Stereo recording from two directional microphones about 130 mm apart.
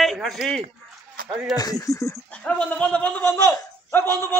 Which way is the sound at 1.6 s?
25° left (ahead or behind).